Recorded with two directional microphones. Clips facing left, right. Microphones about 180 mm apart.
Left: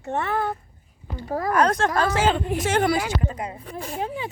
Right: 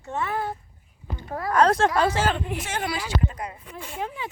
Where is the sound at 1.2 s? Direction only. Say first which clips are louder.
Left 5 dB; 35° left (ahead or behind).